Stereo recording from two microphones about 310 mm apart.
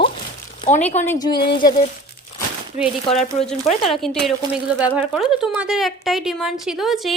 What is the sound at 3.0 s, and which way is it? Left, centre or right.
Speech, centre.